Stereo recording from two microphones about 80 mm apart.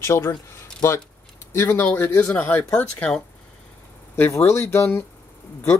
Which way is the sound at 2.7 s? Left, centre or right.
Centre.